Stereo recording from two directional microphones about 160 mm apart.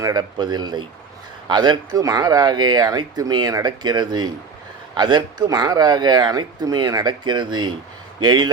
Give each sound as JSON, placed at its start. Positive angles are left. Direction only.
{"t": 0.0, "sound": "speech", "side_deg": -25}